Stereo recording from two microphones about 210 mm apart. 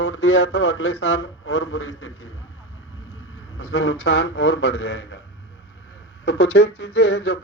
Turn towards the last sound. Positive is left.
turn(degrees=55)  # may be behind; listen again after turning